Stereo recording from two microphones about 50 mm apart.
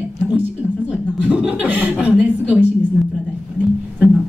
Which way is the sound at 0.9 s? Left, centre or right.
Right.